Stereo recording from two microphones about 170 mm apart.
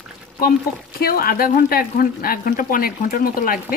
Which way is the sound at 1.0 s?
60° left (ahead or behind).